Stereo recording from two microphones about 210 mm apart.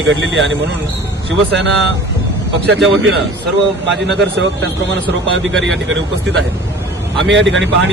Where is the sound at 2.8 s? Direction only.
60° right (ahead or behind).